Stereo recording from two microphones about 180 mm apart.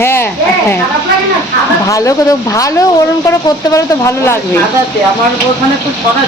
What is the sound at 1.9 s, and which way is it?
Speech, 15° left (ahead or behind).